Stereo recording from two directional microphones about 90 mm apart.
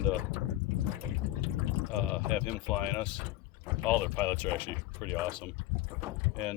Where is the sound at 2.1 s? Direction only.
15° left (ahead or behind).